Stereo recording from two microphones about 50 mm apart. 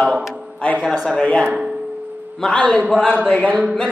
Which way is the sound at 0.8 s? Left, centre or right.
Centre.